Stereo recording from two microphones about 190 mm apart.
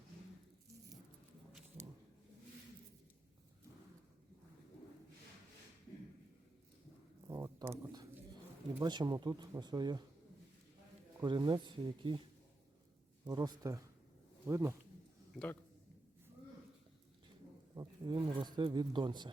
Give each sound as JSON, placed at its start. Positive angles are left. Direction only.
{"t": 7.3, "sound": "a sound", "side_deg": -15}
{"t": 8.8, "sound": "speech", "side_deg": -25}
{"t": 11.2, "sound": "speech", "side_deg": -25}
{"t": 13.2, "sound": "speech", "side_deg": -20}
{"t": 17.7, "sound": "speech", "side_deg": -20}